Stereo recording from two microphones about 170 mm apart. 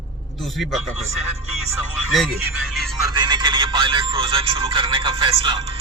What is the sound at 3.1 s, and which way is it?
Speech, 25° right (ahead or behind).